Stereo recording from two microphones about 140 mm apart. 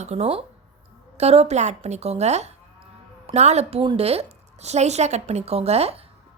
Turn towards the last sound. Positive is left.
turn(degrees=-45)  # may be behind; listen again after turning